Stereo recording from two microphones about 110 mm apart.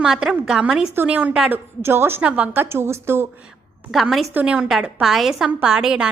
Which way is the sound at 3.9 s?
Centre (ahead or behind).